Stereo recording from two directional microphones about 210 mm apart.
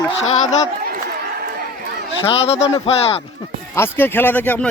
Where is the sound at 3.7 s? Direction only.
10° left (ahead or behind).